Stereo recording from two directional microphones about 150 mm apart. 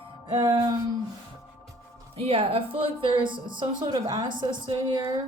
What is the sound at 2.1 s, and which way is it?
A woman's voice, 40° right (ahead or behind).